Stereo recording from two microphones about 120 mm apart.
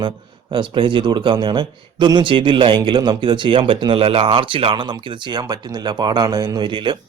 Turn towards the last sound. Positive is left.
turn(degrees=-45)  # may be behind; listen again after turning